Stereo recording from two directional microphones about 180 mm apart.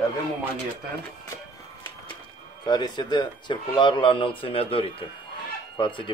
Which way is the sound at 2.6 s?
25° left (ahead or behind).